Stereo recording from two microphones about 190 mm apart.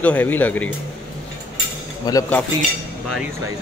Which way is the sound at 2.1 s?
20° left (ahead or behind).